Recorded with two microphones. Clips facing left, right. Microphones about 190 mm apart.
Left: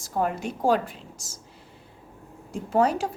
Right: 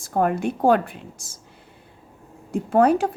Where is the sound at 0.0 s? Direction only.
55° right (ahead or behind).